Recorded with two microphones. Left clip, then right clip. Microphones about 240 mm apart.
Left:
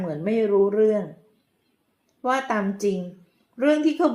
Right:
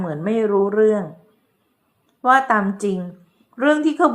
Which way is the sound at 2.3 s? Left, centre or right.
Right.